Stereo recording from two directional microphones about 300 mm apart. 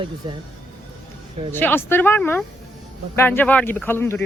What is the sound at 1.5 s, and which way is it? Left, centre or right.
Speech, centre.